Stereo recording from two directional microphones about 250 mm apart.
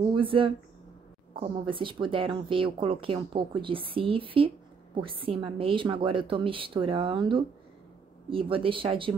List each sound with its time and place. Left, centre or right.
0.1 s a woman's voice: right